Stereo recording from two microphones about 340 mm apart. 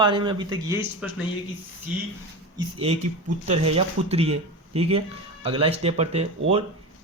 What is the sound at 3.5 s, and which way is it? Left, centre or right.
Speech, centre.